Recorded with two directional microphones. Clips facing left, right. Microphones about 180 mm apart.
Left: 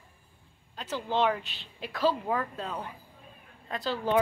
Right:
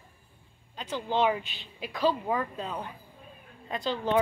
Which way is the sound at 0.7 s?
5° left (ahead or behind).